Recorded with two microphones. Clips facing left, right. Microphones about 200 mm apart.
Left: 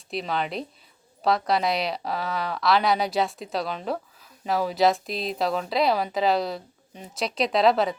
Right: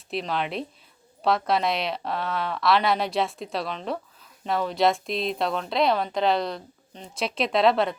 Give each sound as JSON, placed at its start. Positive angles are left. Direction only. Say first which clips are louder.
{"t": 0.1, "sound": "a woman's voice", "louder": "even", "side_deg": 0}